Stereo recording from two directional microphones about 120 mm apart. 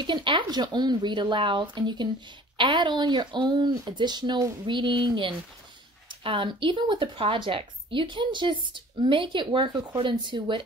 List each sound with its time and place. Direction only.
0.0 s speech: 40° right (ahead or behind)